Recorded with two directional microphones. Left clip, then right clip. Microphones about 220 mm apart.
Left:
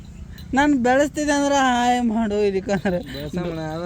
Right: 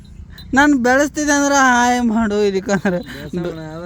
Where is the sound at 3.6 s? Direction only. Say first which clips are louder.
Left 2 dB; centre (ahead or behind).